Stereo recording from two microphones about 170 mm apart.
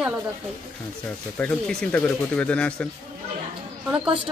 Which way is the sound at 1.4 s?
5° left (ahead or behind).